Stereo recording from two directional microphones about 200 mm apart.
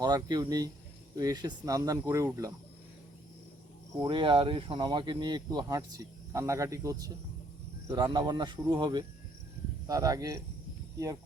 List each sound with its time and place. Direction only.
0.0 s speech: 20° right (ahead or behind)
4.0 s speech: 25° right (ahead or behind)